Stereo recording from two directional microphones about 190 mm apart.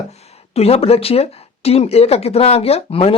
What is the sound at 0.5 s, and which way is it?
Speech, 30° left (ahead or behind).